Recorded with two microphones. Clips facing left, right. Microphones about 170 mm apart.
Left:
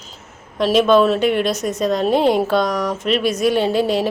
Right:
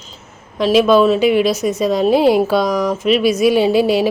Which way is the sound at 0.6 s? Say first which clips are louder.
Right 2 dB; centre (ahead or behind).